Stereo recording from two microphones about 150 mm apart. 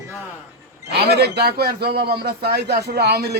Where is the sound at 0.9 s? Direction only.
90° right.